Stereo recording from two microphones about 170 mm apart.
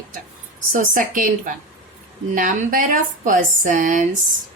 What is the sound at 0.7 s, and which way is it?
A woman's voice, 50° right (ahead or behind).